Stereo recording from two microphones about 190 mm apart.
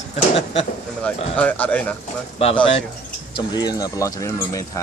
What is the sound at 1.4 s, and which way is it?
Speech, 10° left (ahead or behind).